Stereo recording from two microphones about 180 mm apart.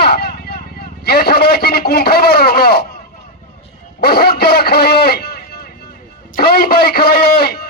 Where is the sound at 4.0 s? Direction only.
60° left (ahead or behind).